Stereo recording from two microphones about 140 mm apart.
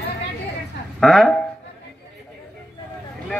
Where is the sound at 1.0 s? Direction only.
Centre (ahead or behind).